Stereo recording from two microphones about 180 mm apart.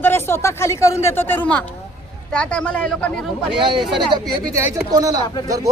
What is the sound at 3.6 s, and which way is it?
Speech, 30° right (ahead or behind).